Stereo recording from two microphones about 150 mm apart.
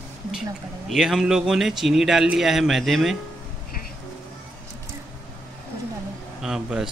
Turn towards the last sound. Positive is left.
turn(degrees=-5)  # may be behind; listen again after turning